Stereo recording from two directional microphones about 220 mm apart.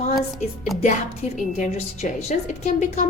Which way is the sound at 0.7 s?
Centre (ahead or behind).